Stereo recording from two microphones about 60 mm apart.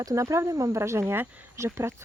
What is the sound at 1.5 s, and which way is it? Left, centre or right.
Speech, right.